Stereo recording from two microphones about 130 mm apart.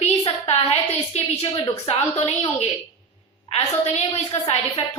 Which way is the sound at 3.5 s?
45° left (ahead or behind).